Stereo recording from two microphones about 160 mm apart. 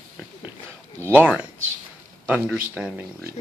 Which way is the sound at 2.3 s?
10° right (ahead or behind).